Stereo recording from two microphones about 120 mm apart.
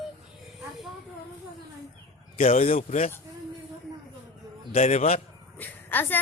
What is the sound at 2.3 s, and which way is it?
Speech, 60° left (ahead or behind).